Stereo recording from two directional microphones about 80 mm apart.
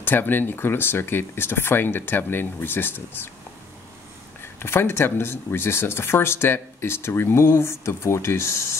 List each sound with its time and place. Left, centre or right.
0.0 s speech: left
4.4 s speech: left